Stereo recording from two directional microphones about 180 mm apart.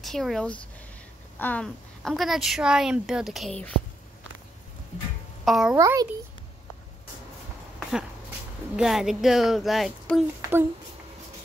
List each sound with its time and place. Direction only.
0.0 s a woman's voice: centre (ahead or behind)
5.4 s a child's voice: centre (ahead or behind)
5.8 s a child's voice: 15° right (ahead or behind)
8.7 s a woman's voice: centre (ahead or behind)